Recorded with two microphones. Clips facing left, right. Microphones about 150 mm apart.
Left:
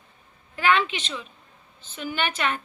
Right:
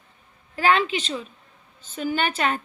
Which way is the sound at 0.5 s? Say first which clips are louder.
Right 2 dB; 35° right (ahead or behind).